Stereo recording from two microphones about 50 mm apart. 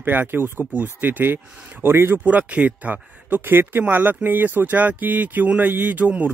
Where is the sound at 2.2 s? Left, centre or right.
Right.